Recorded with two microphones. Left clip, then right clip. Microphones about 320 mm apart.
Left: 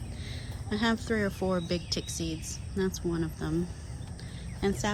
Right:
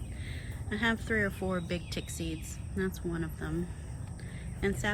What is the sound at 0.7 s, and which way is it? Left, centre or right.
Speech, centre.